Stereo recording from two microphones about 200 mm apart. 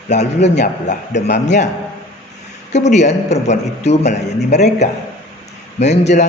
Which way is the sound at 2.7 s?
35° left (ahead or behind).